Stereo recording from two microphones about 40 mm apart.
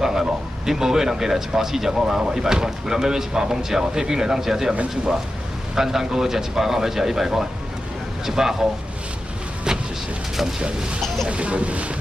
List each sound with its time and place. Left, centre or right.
0.0 s speech: centre
5.8 s speech: centre
9.7 s vehicle: centre
11.2 s speech: right